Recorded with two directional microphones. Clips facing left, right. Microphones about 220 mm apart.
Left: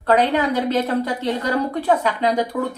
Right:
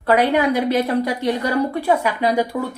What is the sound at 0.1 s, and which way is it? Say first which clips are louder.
A woman's voice: right 1 dB; 10° right (ahead or behind).